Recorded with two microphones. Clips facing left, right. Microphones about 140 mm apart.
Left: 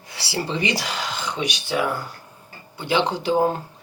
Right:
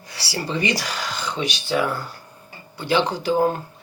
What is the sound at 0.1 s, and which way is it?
Speech, 20° left (ahead or behind).